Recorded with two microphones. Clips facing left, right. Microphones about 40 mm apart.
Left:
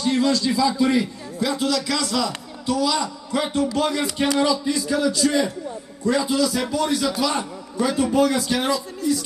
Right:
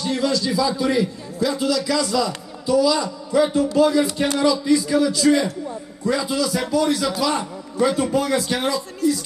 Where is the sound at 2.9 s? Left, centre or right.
Centre.